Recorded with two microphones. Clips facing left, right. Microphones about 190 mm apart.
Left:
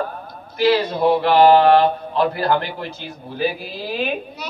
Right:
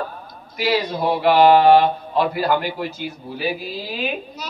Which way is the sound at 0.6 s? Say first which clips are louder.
Left 4 dB; 10° right (ahead or behind).